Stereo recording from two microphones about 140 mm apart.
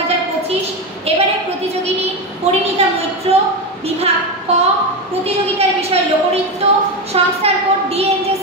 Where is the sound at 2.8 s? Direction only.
45° right (ahead or behind).